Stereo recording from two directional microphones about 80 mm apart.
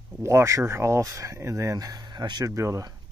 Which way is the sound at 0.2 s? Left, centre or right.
Right.